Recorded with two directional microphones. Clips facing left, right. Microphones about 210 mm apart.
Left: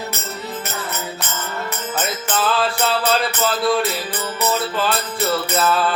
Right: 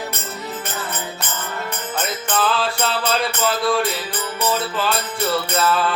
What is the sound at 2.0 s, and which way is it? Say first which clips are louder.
Music: even; 5° left (ahead or behind).